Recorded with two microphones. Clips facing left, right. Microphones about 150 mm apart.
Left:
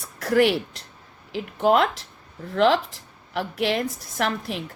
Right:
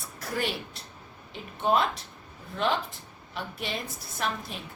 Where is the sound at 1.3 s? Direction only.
75° left (ahead or behind).